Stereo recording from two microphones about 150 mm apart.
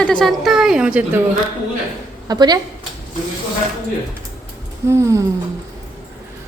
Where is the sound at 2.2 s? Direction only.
25° right (ahead or behind).